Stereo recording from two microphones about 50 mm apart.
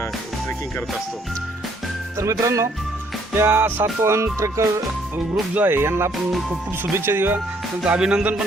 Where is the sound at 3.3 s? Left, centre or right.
Right.